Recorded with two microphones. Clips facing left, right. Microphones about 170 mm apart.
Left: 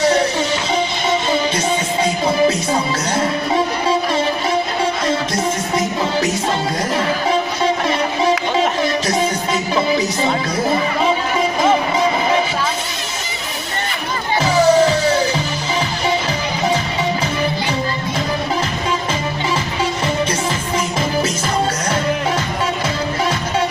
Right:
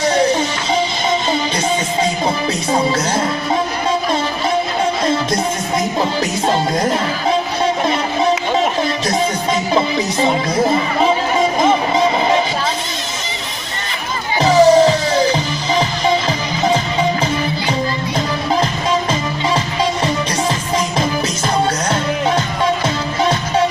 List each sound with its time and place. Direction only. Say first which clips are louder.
14.4 s music: right 4 dB; 35° right (ahead or behind)